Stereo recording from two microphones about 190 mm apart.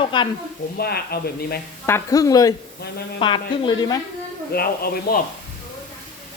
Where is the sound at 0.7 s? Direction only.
55° left (ahead or behind).